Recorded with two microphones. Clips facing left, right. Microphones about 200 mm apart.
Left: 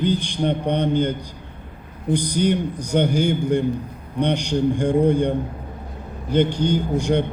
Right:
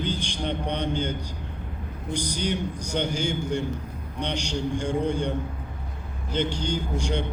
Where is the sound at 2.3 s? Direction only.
55° left (ahead or behind).